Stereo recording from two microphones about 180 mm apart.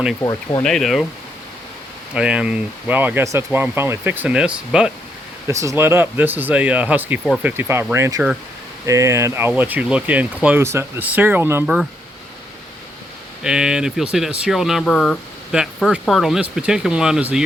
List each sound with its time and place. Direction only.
0.2 s speech: 20° left (ahead or behind)
0.6 s speech: centre (ahead or behind)
2.1 s speech: 5° right (ahead or behind)
5.5 s speech: 15° right (ahead or behind)
13.4 s speech: 5° right (ahead or behind)